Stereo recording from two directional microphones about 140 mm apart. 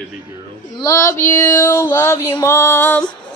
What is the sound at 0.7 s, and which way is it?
Music, 25° left (ahead or behind).